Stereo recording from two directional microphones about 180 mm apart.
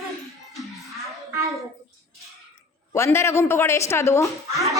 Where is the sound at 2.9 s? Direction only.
15° left (ahead or behind).